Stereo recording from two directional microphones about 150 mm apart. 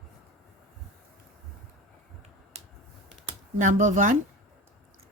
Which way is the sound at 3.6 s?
55° right (ahead or behind).